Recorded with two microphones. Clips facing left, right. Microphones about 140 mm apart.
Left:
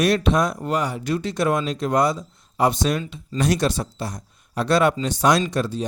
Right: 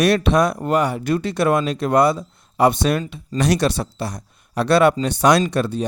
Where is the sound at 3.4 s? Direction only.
75° right (ahead or behind).